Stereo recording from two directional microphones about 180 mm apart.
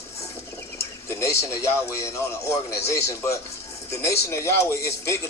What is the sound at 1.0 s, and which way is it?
A man's voice, 15° left (ahead or behind).